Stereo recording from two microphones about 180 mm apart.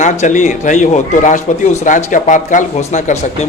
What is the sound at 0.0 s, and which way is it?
A man's voice, 45° left (ahead or behind).